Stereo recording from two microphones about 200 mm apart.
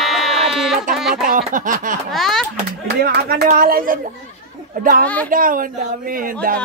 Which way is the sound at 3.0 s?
50° right (ahead or behind).